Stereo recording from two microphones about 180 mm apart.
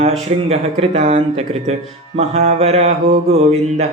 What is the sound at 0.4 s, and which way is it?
Speech, 35° right (ahead or behind).